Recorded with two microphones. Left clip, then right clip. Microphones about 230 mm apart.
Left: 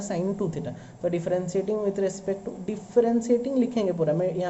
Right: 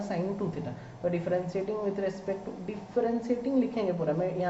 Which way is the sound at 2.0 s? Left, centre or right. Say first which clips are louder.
Left 5 dB; left.